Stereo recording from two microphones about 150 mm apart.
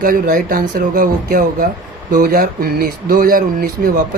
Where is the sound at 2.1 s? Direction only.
90° right.